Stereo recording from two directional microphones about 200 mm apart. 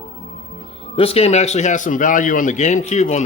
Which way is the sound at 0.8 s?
30° left (ahead or behind).